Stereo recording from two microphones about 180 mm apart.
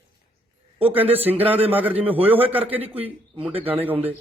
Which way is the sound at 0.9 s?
10° right (ahead or behind).